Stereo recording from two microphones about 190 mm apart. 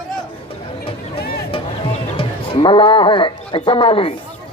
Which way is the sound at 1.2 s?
55° left (ahead or behind).